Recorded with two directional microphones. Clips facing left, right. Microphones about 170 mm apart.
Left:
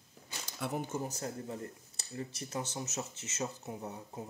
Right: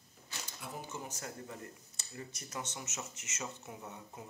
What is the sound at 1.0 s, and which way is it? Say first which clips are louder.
Speech: left 6 dB; 35° left (ahead or behind).